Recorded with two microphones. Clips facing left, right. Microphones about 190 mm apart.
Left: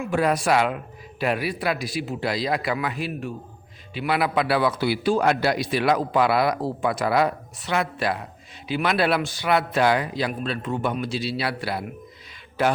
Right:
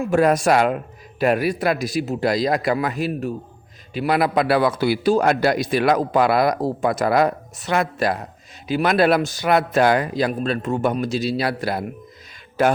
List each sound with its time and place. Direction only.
0.0 s a man's voice: 45° right (ahead or behind)